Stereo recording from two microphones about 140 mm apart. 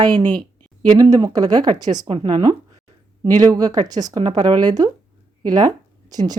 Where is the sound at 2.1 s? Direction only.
40° right (ahead or behind).